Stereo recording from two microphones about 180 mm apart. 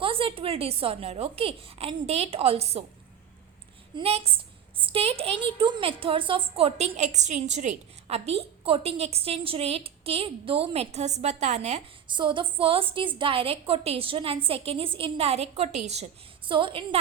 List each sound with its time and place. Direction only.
0.0 s a woman's voice: 30° right (ahead or behind)
3.9 s a woman's voice: 35° right (ahead or behind)
12.1 s a woman's voice: 25° right (ahead or behind)
16.5 s a woman's voice: 30° right (ahead or behind)